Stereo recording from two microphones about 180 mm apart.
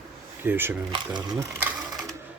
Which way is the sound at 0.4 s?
10° right (ahead or behind).